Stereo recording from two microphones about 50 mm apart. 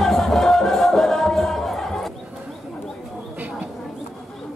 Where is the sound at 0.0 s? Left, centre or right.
Centre.